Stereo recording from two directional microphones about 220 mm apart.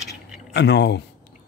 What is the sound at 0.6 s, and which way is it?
Speech, 50° left (ahead or behind).